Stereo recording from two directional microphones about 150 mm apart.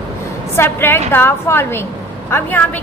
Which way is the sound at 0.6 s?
15° left (ahead or behind).